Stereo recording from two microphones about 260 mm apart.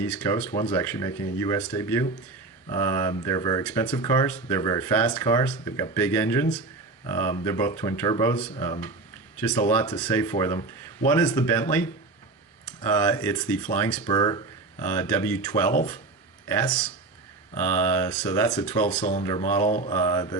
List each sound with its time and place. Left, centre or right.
0.0 s speech: centre
3.6 s speech: centre
3.9 s speech: centre
18.9 s speech: left
19.6 s mantra: left
19.9 s speech: centre